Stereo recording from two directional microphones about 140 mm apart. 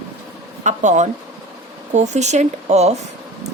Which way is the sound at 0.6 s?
60° right (ahead or behind).